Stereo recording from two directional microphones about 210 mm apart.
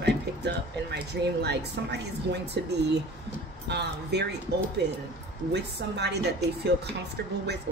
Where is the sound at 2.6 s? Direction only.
55° right (ahead or behind).